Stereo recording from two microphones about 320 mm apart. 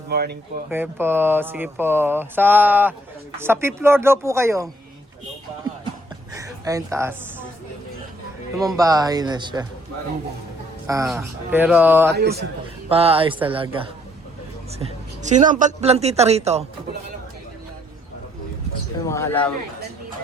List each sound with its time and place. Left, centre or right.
0.1 s a man's voice: right
0.7 s speech: centre
6.3 s speech: centre
8.5 s speech: centre
10.8 s speech: centre
12.9 s a man's voice: centre
19.0 s a man's voice: centre